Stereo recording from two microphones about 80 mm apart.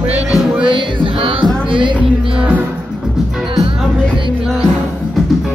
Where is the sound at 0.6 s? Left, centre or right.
Right.